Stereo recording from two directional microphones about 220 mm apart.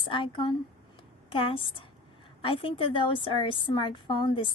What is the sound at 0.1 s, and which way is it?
A woman's voice, 25° left (ahead or behind).